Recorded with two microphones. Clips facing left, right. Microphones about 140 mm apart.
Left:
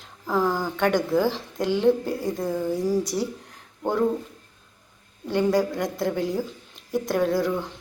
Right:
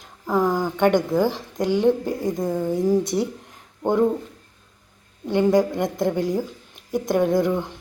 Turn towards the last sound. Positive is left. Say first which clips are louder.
# right 3 dB
turn(degrees=-15)  # may be behind; listen again after turning